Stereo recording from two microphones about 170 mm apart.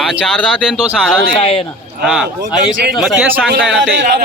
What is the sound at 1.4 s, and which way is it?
Speech, 35° left (ahead or behind).